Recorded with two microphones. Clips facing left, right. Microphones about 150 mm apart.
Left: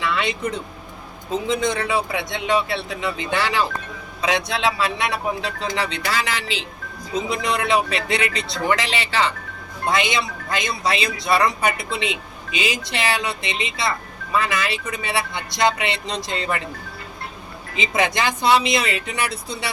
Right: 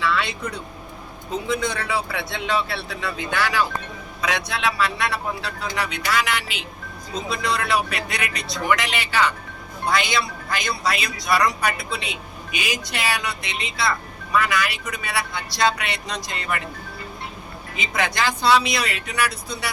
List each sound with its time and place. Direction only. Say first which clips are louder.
0.0 s a man's voice: left 1 dB; 20° left (ahead or behind)
17.7 s a man's voice: left 3 dB; 20° left (ahead or behind)